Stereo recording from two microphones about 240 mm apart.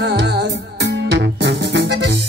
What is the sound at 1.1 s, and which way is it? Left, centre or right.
Music, right.